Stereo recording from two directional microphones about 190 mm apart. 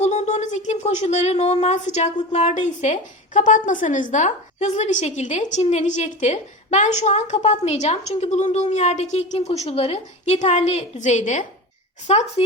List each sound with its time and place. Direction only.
0.0 s a woman's voice: 35° left (ahead or behind)